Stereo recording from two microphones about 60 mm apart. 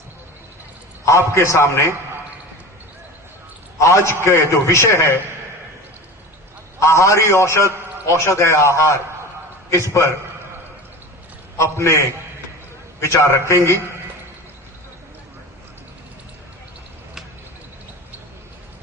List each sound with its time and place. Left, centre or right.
1.0 s a man's voice: left
3.8 s a man's voice: left
6.7 s a man's voice: left
11.5 s a man's voice: left